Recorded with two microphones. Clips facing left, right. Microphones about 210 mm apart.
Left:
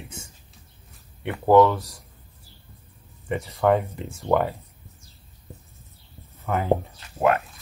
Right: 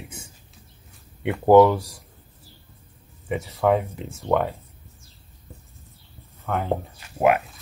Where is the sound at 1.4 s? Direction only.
15° right (ahead or behind).